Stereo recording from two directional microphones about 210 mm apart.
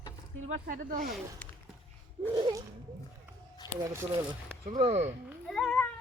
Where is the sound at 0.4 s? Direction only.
40° right (ahead or behind).